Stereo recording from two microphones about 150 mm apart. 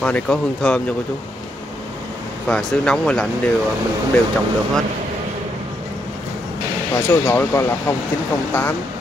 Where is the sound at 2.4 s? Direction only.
5° left (ahead or behind).